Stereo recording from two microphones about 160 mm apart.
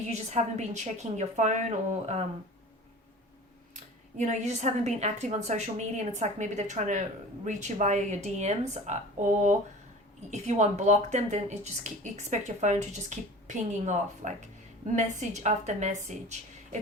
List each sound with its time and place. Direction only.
0.1 s speech: 45° right (ahead or behind)
4.2 s speech: 45° right (ahead or behind)